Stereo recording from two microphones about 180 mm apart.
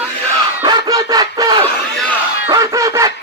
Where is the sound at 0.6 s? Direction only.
20° right (ahead or behind).